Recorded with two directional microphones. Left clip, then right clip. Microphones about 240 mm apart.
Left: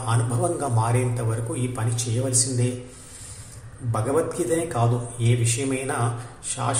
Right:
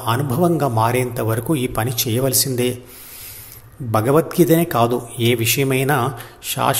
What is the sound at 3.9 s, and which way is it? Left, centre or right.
A man's voice, right.